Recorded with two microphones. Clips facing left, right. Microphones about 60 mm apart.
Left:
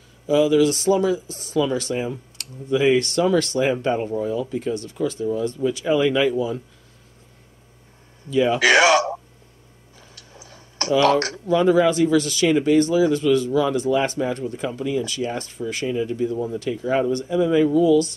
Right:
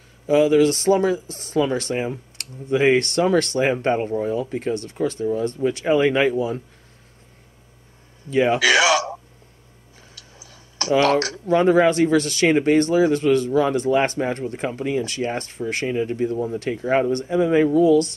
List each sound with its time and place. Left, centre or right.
0.3 s speech: right
8.3 s speech: right
8.5 s speech: left
10.1 s a sound: left
10.9 s speech: right